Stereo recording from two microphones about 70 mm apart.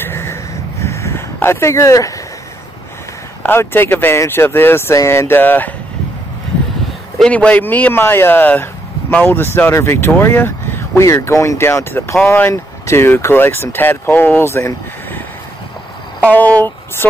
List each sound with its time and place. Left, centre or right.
0.0 s a sound: left
3.4 s speech: left
4.9 s speech: left
5.4 s speech: left
7.2 s speech: centre
7.9 s speech: left
11.1 s speech: left
14.4 s speech: left
16.2 s speech: left